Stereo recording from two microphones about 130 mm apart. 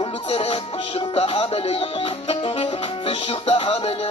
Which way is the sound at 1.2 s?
45° left (ahead or behind).